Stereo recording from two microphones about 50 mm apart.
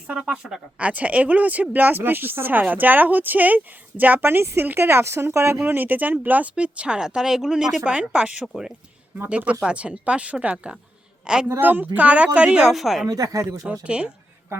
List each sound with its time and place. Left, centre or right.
0.2 s speech: centre
0.8 s speech: right
4.2 s speech: right
4.9 s speech: right
6.5 s speech: right
9.3 s speech: right
11.6 s speech: right; by 12.7 s centre
12.7 s speech: centre
13.3 s speech: right
13.7 s speech: right